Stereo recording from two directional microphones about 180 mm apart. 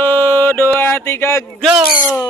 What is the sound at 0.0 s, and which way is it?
Mantra, 10° left (ahead or behind).